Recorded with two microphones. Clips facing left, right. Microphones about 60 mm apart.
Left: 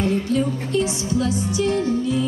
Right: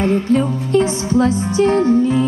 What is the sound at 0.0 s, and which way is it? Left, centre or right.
Music, right.